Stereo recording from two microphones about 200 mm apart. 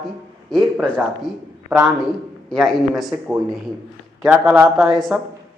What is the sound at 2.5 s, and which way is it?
A man's voice, centre (ahead or behind).